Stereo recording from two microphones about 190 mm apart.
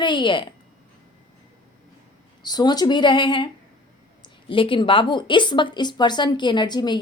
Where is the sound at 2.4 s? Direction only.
20° left (ahead or behind).